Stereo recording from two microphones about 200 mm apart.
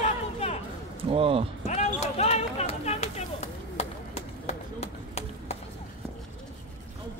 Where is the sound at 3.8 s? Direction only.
30° left (ahead or behind).